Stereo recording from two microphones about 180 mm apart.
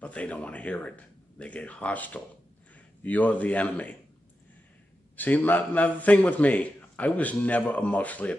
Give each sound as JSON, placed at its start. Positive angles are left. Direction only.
{"t": 0.0, "sound": "a man's voice", "side_deg": 5}
{"t": 5.1, "sound": "a man's voice", "side_deg": 10}